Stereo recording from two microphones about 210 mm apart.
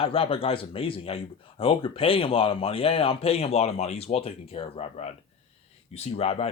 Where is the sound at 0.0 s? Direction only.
25° left (ahead or behind).